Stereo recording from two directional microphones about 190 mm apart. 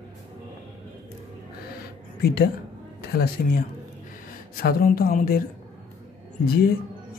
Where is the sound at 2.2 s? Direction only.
55° left (ahead or behind).